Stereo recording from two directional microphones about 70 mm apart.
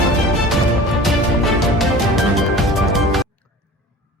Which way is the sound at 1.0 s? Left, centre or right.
Centre.